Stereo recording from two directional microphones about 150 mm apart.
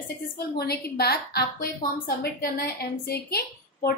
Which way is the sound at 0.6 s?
90° left.